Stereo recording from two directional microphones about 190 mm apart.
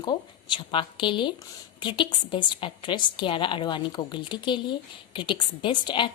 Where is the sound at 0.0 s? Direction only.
25° left (ahead or behind).